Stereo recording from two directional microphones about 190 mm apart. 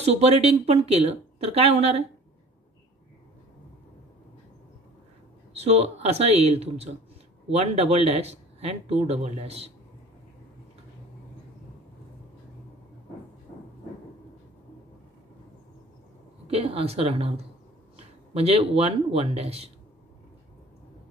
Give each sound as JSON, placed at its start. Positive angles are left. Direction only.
{"t": 0.0, "sound": "speech", "side_deg": -35}
{"t": 5.5, "sound": "speech", "side_deg": -35}
{"t": 16.4, "sound": "speech", "side_deg": -30}